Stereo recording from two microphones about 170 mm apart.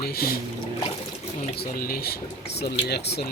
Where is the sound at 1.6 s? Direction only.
60° left (ahead or behind).